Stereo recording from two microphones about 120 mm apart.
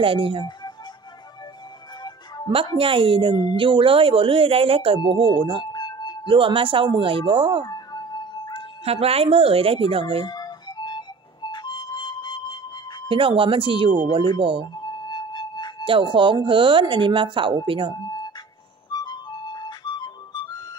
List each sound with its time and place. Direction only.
0.0 s speech: 45° right (ahead or behind)
2.8 s speech: 45° right (ahead or behind)
5.7 s music: 35° left (ahead or behind)
6.2 s speech: 45° right (ahead or behind)
7.6 s music: 35° left (ahead or behind)
8.8 s speech: 55° right (ahead or behind)
10.2 s music: 35° left (ahead or behind)
13.1 s speech: 45° right (ahead or behind)
14.8 s music: 35° left (ahead or behind)
15.8 s speech: 45° right (ahead or behind)
18.9 s music: 35° left (ahead or behind)